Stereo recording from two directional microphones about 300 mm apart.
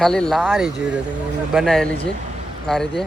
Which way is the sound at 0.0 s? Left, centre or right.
Centre.